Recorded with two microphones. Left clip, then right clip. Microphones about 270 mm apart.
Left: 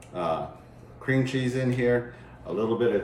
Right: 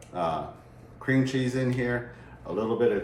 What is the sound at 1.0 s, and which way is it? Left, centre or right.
Speech, centre.